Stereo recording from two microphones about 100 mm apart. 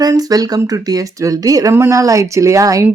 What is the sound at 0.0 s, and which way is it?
Speech, 40° right (ahead or behind).